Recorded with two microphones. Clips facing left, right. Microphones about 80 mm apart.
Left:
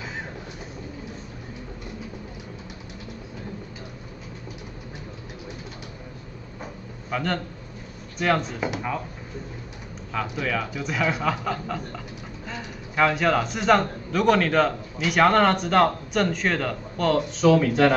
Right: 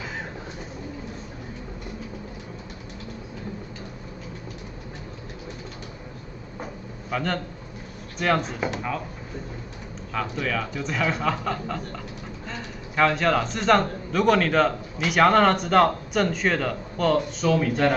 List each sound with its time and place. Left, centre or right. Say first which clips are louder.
7.1 s a man's voice: even; centre
10.1 s a man's voice: even; centre
17.4 s speech: left 4 dB; left